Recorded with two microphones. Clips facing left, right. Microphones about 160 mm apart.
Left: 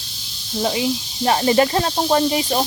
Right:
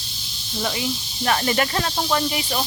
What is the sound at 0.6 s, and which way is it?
Speech, 30° left (ahead or behind).